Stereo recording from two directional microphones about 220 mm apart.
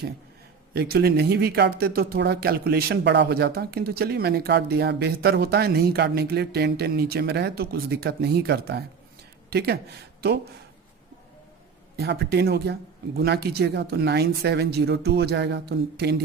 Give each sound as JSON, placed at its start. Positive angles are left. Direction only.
{"t": 0.7, "sound": "speech", "side_deg": -45}
{"t": 11.9, "sound": "speech", "side_deg": -50}